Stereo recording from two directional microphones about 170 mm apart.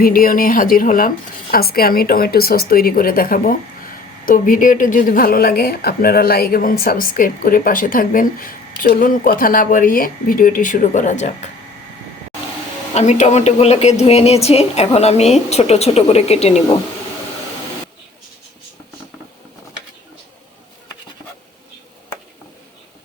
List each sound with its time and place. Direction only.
0.0 s speech: 55° left (ahead or behind)
12.9 s a woman's voice: 40° left (ahead or behind)